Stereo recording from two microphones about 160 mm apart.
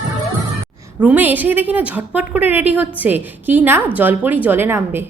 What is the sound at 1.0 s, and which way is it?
A woman's voice, 10° right (ahead or behind).